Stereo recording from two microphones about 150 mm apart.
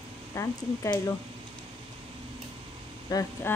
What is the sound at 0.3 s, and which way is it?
Speech, 20° left (ahead or behind).